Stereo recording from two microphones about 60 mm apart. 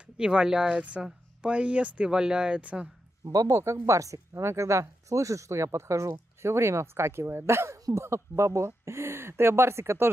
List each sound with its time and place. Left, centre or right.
0.0 s speech: centre
3.3 s speech: right
4.3 s speech: right